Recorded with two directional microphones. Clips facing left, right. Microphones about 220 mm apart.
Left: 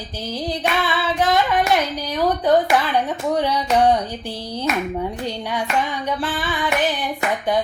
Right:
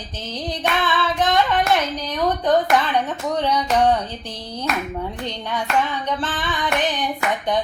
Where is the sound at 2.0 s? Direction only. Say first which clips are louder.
Left 2 dB; 10° left (ahead or behind).